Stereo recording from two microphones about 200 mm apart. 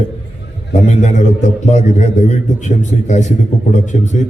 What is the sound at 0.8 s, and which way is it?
A man's voice, 35° left (ahead or behind).